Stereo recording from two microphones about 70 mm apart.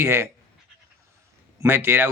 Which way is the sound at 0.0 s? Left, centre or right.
Right.